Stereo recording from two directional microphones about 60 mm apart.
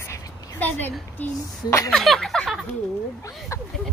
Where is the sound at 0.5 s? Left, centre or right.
Left.